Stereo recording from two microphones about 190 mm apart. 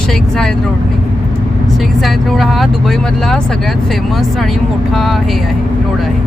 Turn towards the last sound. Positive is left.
turn(degrees=0)  # may be behind; listen again after turning